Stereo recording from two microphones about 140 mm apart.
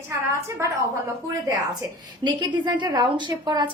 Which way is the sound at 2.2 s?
30° right (ahead or behind).